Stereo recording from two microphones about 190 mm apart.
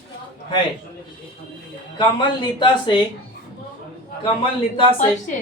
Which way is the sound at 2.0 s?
25° left (ahead or behind).